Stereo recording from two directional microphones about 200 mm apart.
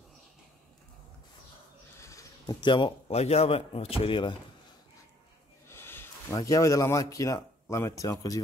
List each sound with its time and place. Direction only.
2.0 s speech: 15° left (ahead or behind)
5.7 s speech: 10° left (ahead or behind)